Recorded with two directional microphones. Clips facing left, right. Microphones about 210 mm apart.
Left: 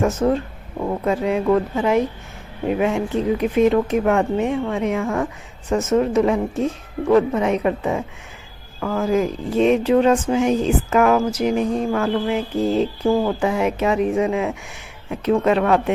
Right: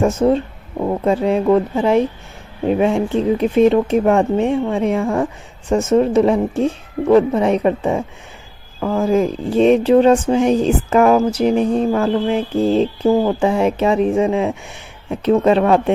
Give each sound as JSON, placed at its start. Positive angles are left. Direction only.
{"t": 0.0, "sound": "a woman's voice", "side_deg": -30}